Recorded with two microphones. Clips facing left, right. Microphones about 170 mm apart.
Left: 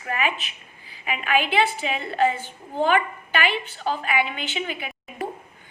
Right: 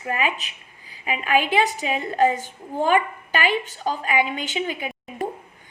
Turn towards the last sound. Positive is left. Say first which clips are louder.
# right 3 dB
turn(degrees=-40)  # may be behind; listen again after turning